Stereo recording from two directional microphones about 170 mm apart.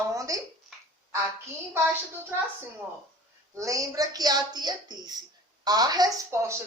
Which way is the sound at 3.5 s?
20° right (ahead or behind).